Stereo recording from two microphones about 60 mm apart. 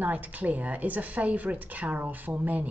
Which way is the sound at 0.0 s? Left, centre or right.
Right.